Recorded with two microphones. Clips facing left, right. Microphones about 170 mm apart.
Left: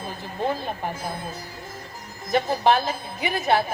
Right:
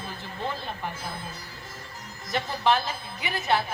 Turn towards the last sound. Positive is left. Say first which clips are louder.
# left 5 dB
turn(degrees=50)  # may be behind; listen again after turning